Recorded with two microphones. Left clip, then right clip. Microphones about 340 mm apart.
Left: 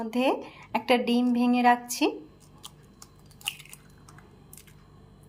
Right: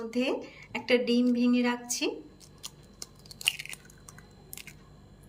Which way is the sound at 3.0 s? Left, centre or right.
Centre.